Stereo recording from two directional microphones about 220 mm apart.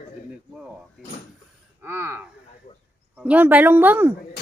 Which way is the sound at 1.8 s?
10° right (ahead or behind).